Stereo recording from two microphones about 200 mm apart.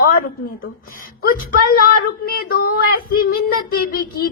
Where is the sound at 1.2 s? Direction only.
45° left (ahead or behind).